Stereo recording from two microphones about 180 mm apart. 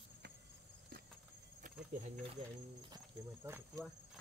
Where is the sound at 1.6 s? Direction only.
40° right (ahead or behind).